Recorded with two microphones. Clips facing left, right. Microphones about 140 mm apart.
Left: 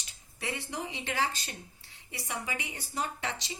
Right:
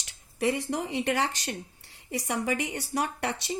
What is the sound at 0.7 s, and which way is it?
Speech, 70° right (ahead or behind).